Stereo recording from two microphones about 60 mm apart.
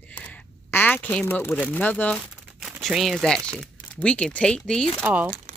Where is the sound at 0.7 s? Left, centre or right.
Left.